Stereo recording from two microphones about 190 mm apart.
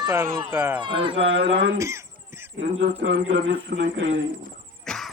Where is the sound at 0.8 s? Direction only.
25° right (ahead or behind).